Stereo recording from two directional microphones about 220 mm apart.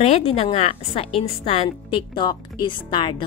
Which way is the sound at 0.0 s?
30° left (ahead or behind).